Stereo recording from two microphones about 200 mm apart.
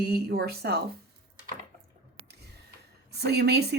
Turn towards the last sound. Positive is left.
turn(degrees=-55)  # may be behind; listen again after turning